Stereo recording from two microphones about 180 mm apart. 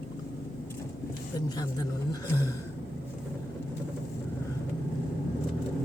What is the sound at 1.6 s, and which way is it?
Speech, 20° left (ahead or behind).